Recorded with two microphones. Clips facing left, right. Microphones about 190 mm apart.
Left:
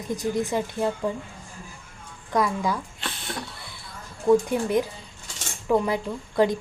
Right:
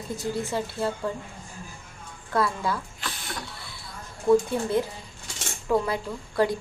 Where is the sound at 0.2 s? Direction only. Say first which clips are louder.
Left 3 dB; 15° left (ahead or behind).